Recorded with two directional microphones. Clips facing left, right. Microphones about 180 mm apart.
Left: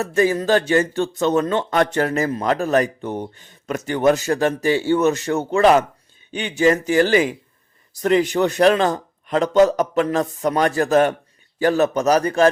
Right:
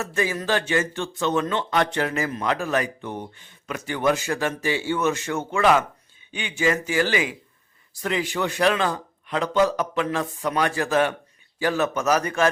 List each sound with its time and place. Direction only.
0.0 s a man's voice: 40° left (ahead or behind)